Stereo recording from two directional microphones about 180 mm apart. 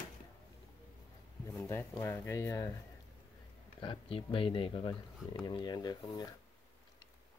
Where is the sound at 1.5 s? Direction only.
15° left (ahead or behind).